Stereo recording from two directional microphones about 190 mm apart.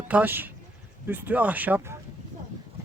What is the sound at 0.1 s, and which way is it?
Speech, 10° right (ahead or behind).